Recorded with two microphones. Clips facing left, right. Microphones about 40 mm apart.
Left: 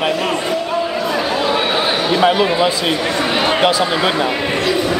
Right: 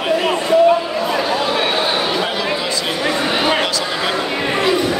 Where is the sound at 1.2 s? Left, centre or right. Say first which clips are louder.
Left 1 dB; centre.